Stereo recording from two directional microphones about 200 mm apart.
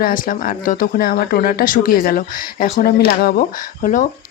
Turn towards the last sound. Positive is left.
turn(degrees=40)  # may be behind; listen again after turning